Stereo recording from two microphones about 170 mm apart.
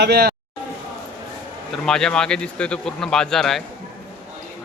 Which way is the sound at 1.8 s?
5° left (ahead or behind).